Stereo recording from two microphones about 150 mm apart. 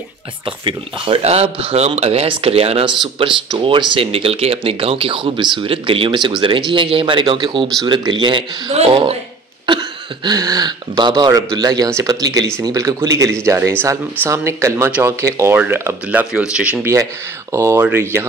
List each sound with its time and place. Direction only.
0.5 s speech: 35° right (ahead or behind)
9.7 s speech: 30° right (ahead or behind); by 16.9 s 10° right (ahead or behind)
16.9 s speech: 20° right (ahead or behind)